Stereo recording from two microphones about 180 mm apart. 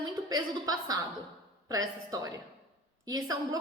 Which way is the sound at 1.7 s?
20° right (ahead or behind).